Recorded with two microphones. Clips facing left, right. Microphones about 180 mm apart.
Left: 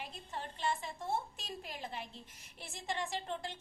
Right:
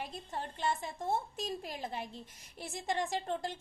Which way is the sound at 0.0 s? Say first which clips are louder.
Right 4 dB; 40° right (ahead or behind).